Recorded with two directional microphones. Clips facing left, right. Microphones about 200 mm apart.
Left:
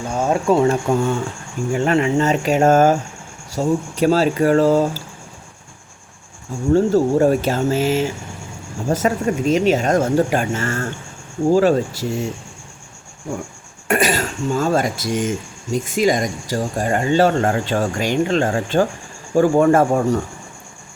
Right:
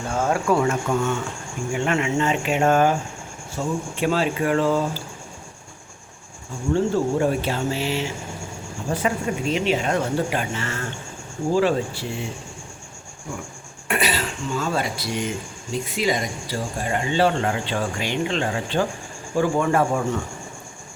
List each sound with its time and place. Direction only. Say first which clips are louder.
0.2 s speech: left 5 dB; 20° left (ahead or behind); by 5.0 s 40° left (ahead or behind)
6.7 s speech: left 6 dB; 40° left (ahead or behind)
13.8 s speech: left 6 dB; 45° left (ahead or behind)